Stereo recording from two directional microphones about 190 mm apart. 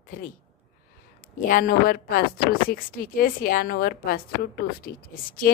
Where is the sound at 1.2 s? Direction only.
45° left (ahead or behind).